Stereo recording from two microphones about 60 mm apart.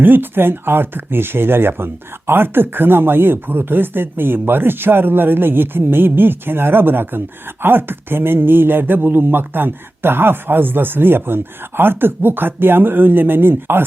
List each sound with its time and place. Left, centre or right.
0.0 s speech: right